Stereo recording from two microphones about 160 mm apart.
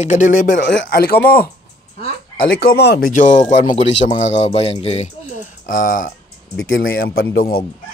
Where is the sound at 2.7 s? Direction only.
80° left; by 5.4 s 45° left (ahead or behind).